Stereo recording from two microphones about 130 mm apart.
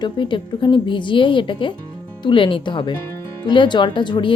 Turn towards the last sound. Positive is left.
turn(degrees=35)  # may be behind; listen again after turning